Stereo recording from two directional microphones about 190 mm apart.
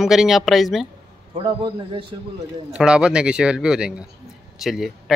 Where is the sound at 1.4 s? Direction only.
25° right (ahead or behind).